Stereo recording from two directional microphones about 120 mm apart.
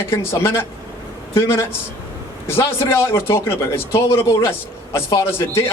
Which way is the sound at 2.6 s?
20° left (ahead or behind).